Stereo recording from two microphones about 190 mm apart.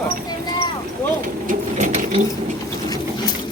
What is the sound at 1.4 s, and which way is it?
Sewing machine, 40° right (ahead or behind).